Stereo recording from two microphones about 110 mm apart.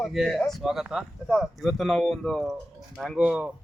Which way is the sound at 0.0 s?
Centre (ahead or behind).